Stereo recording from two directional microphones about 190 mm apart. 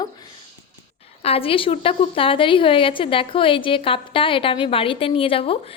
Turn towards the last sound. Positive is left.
turn(degrees=30)  # may be behind; listen again after turning